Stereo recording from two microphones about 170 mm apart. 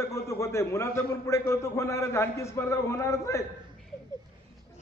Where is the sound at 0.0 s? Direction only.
15° left (ahead or behind).